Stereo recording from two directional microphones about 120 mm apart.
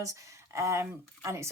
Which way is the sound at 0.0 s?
25° right (ahead or behind).